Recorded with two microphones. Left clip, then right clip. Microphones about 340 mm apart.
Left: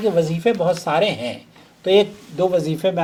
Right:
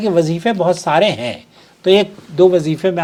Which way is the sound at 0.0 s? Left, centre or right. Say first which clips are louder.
Right 3 dB; right.